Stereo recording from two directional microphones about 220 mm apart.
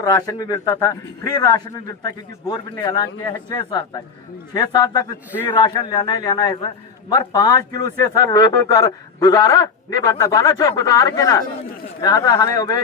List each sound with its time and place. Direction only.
0.0 s a man's voice: 15° left (ahead or behind)